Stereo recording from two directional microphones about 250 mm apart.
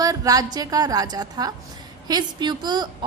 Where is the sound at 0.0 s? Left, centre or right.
Centre.